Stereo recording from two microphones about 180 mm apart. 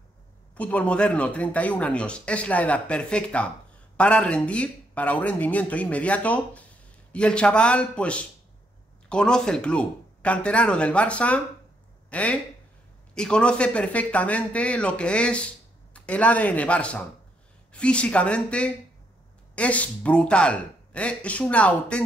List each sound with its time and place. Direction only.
0.6 s speech: 5° left (ahead or behind)